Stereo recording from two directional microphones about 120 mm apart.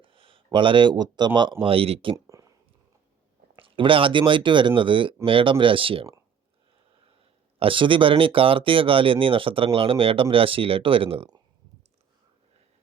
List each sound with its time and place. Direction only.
0.0 s speech: 45° right (ahead or behind)
2.2 s a sound: 30° right (ahead or behind)
3.6 s speech: 45° right (ahead or behind)
7.6 s speech: 45° right (ahead or behind)